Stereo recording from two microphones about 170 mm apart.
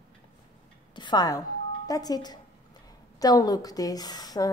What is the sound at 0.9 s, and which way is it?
A woman's voice, 25° left (ahead or behind).